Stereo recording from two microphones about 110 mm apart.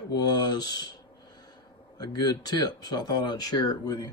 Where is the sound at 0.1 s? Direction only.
40° left (ahead or behind).